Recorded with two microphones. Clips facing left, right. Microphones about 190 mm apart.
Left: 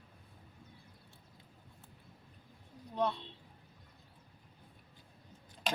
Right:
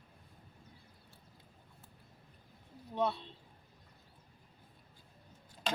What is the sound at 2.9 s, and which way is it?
Speech, 5° right (ahead or behind).